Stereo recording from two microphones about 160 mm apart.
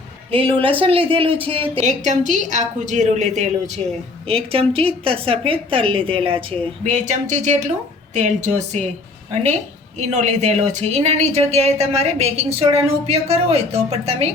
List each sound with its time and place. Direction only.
0.3 s a woman's voice: 35° right (ahead or behind)
1.9 s speech: 50° right (ahead or behind)
4.3 s a woman's voice: 35° right (ahead or behind)
6.8 s speech: 45° right (ahead or behind)